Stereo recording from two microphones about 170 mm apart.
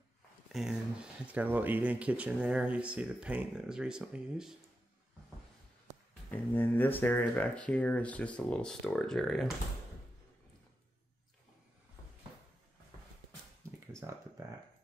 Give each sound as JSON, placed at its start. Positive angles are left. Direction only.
{"t": 0.5, "sound": "speech", "side_deg": 0}
{"t": 6.3, "sound": "speech", "side_deg": 10}
{"t": 13.9, "sound": "a sound", "side_deg": -15}